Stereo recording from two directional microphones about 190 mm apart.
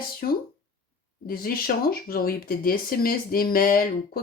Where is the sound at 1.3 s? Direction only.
50° left (ahead or behind).